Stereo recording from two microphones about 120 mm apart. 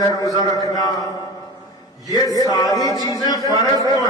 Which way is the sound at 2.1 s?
30° left (ahead or behind).